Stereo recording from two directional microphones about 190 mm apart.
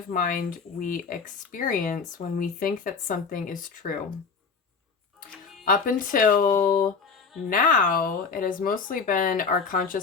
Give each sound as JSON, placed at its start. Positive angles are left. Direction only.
{"t": 0.1, "sound": "speech", "side_deg": 45}
{"t": 5.6, "sound": "speech", "side_deg": 45}